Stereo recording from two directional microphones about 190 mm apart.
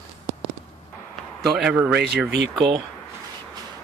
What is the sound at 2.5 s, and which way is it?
Speech, 25° right (ahead or behind).